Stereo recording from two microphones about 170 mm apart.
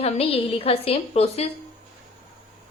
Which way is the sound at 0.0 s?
35° left (ahead or behind).